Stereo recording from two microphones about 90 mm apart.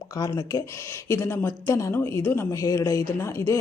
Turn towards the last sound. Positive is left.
turn(degrees=30)  # may be behind; listen again after turning